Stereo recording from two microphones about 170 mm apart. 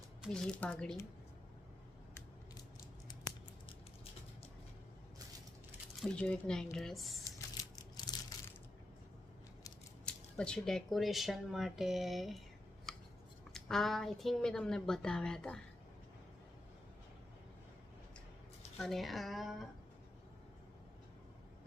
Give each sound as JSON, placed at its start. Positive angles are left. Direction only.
{"t": 0.4, "sound": "speech", "side_deg": 10}
{"t": 6.0, "sound": "speech", "side_deg": 5}
{"t": 7.3, "sound": "crushing", "side_deg": 20}
{"t": 10.1, "sound": "speech", "side_deg": 5}
{"t": 12.9, "sound": "scissors", "side_deg": 5}
{"t": 13.5, "sound": "speech", "side_deg": 0}
{"t": 18.8, "sound": "speech", "side_deg": 0}